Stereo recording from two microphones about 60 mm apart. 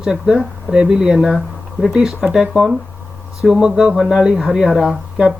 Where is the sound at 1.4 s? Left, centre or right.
Centre.